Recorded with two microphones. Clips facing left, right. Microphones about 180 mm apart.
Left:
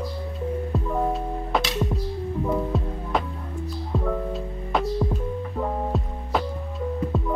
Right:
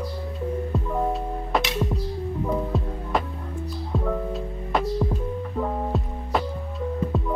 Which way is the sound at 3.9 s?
Centre (ahead or behind).